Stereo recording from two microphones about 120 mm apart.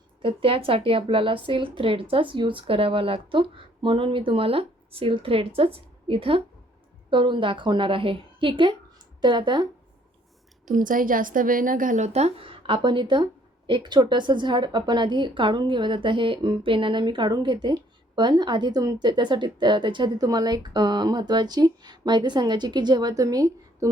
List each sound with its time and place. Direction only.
0.2 s a woman's voice: 45° right (ahead or behind)
10.7 s a woman's voice: 90° right; by 23.9 s 30° right (ahead or behind)